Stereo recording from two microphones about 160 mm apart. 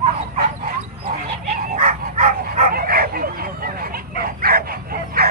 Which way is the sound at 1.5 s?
55° right (ahead or behind).